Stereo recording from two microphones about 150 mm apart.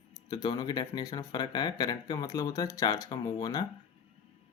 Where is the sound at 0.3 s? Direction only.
25° left (ahead or behind).